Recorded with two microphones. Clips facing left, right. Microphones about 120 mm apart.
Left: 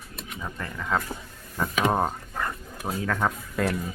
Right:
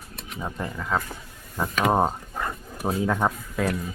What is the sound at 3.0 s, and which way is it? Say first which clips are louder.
Speech: right 2 dB; 20° right (ahead or behind).